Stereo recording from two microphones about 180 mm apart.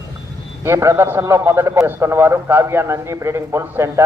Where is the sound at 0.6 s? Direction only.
15° right (ahead or behind).